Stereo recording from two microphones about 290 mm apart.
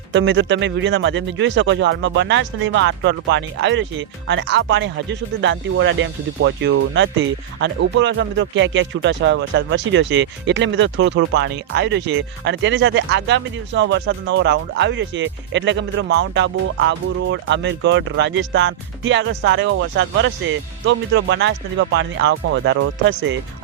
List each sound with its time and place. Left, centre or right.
0.1 s speech: right